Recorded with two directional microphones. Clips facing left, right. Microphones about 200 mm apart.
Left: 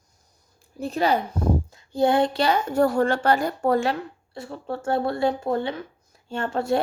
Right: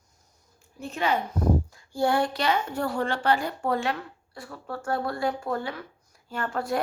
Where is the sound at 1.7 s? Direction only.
20° left (ahead or behind); by 3.7 s 40° left (ahead or behind).